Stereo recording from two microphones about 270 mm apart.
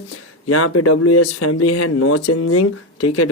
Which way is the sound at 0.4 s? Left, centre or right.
Left.